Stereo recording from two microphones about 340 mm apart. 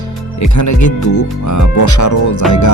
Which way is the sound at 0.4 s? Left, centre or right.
Left.